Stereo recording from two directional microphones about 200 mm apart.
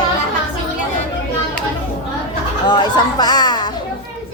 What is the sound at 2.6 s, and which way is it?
A woman's voice, 20° left (ahead or behind).